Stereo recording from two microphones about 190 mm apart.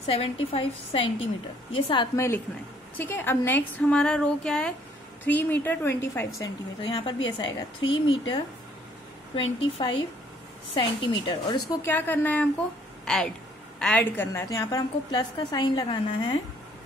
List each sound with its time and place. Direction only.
0.0 s a woman's voice: 30° left (ahead or behind)
11.9 s a woman's voice: 10° left (ahead or behind)